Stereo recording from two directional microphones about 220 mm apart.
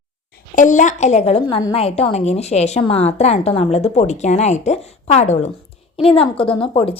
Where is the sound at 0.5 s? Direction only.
35° left (ahead or behind).